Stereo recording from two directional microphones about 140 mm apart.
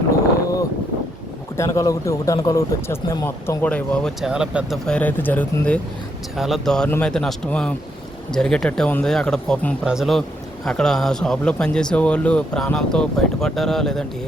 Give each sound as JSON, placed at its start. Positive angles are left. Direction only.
{"t": 1.5, "sound": "a man's voice", "side_deg": 20}
{"t": 4.3, "sound": "speech", "side_deg": -5}
{"t": 4.9, "sound": "speech", "side_deg": 10}
{"t": 6.3, "sound": "speech", "side_deg": 0}